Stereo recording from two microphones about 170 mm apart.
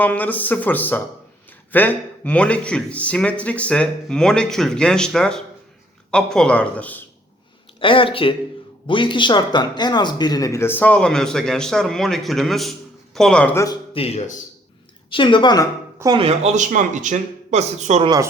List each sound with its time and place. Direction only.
0.0 s speech: 10° left (ahead or behind)
7.8 s speech: 30° left (ahead or behind); by 13.7 s 15° left (ahead or behind)
13.9 s speech: 35° left (ahead or behind)
15.1 s a woman's voice: 30° left (ahead or behind)
16.1 s speech: 35° right (ahead or behind)
18.0 s speech: 25° right (ahead or behind)